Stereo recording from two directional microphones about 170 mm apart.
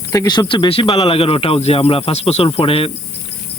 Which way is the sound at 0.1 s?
20° left (ahead or behind).